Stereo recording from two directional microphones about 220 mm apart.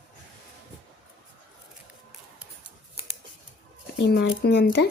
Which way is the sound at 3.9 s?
50° left (ahead or behind).